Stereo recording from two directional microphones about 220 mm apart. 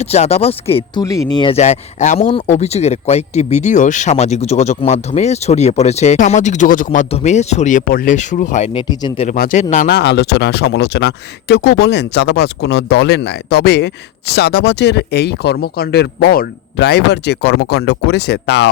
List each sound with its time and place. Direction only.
0.0 s speech: 30° left (ahead or behind)
8.9 s speech: 20° left (ahead or behind)
9.2 s speech: 40° left (ahead or behind)